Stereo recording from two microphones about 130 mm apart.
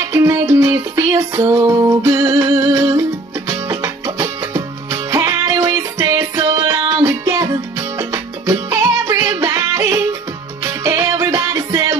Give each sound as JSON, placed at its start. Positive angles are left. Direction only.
{"t": 0.1, "sound": "music", "side_deg": -25}